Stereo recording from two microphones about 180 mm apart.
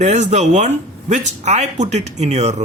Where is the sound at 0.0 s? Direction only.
40° right (ahead or behind).